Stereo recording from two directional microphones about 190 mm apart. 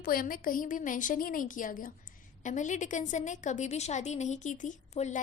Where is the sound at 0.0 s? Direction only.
50° left (ahead or behind).